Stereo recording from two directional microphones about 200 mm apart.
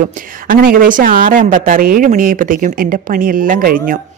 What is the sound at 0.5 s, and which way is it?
A woman's voice, 45° right (ahead or behind).